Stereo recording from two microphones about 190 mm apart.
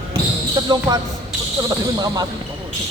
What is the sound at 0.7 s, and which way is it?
Speech, 20° right (ahead or behind).